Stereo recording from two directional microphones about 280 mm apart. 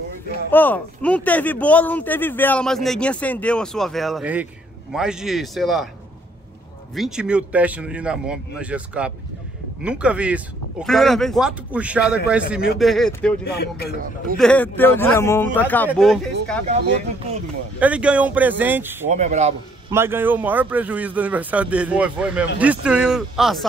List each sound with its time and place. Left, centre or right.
0.5 s speech: centre
7.0 s speech: centre
13.4 s speech: left
14.4 s speech: centre
17.7 s speech: centre
19.0 s a man's voice: right
19.9 s speech: centre